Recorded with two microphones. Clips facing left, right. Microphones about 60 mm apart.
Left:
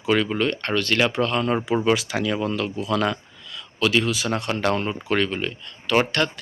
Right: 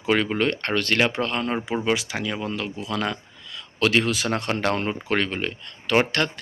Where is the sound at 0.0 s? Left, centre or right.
Right.